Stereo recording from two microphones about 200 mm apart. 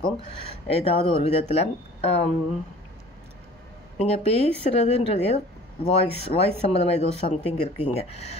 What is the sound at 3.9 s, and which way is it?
Speech, 30° left (ahead or behind).